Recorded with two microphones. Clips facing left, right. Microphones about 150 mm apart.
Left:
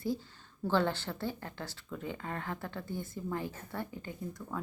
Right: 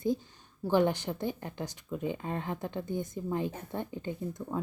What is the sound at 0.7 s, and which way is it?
A woman's voice, 15° right (ahead or behind).